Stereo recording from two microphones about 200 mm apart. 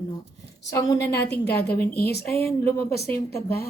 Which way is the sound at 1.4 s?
55° left (ahead or behind).